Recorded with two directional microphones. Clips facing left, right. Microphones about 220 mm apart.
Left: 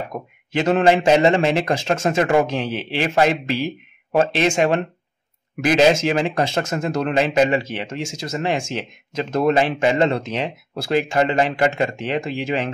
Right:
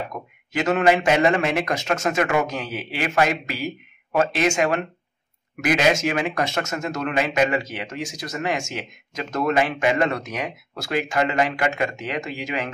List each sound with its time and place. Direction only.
0.1 s speech: 30° left (ahead or behind)